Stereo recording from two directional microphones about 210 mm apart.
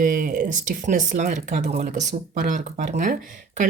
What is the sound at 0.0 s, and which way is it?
Speech, 40° right (ahead or behind).